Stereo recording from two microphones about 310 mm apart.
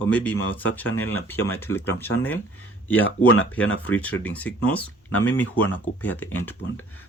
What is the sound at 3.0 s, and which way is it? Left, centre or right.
Speech, left.